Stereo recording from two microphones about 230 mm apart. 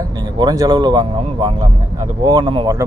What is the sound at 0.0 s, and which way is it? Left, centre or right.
Speech, centre.